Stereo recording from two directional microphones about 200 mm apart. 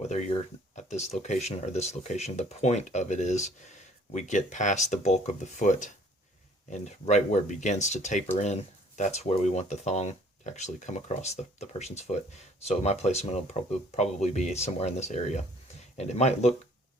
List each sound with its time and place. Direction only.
0.0 s speech: 35° left (ahead or behind)